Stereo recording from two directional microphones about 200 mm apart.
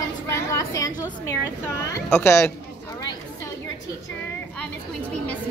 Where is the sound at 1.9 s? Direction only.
10° left (ahead or behind).